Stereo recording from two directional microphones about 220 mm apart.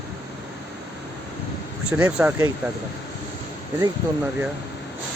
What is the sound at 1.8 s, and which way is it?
Speech, 5° right (ahead or behind).